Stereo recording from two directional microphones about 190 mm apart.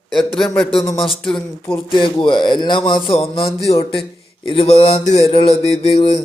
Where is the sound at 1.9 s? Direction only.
25° left (ahead or behind).